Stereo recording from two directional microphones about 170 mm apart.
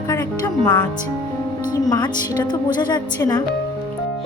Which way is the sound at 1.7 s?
25° left (ahead or behind).